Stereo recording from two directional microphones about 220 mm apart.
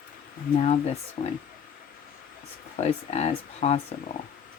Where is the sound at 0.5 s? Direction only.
30° left (ahead or behind).